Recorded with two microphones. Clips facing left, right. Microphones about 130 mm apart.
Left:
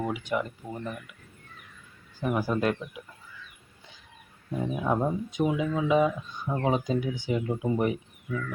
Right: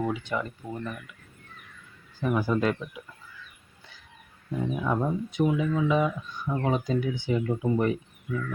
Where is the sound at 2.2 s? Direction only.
10° left (ahead or behind).